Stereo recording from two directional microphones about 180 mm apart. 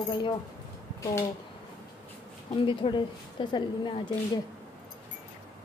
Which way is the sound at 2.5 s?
30° left (ahead or behind).